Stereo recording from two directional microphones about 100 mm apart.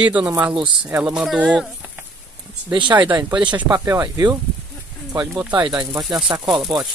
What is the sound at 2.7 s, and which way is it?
Speech, 50° right (ahead or behind).